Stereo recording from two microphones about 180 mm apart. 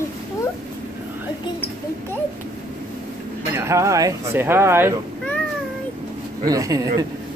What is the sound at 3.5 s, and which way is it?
Speech, 15° right (ahead or behind).